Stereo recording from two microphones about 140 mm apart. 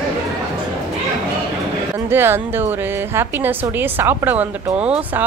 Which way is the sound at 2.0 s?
15° right (ahead or behind).